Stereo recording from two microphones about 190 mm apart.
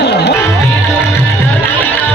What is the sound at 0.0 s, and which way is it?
Music, 60° left (ahead or behind).